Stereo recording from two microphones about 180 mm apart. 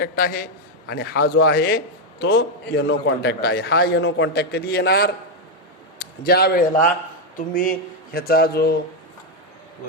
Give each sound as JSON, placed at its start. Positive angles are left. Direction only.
{"t": 0.0, "sound": "a man's voice", "side_deg": 55}